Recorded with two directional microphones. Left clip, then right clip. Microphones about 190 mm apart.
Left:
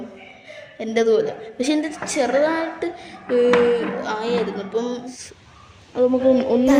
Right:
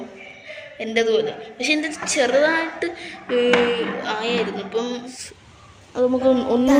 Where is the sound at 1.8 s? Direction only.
15° left (ahead or behind).